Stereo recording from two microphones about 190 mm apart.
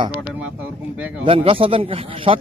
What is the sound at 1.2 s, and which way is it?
Speech, 30° right (ahead or behind).